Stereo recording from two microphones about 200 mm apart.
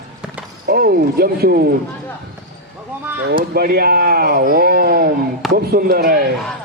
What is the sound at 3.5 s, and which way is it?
A man's voice, 50° right (ahead or behind).